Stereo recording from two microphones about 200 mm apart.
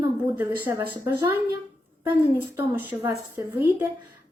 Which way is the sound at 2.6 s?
10° right (ahead or behind).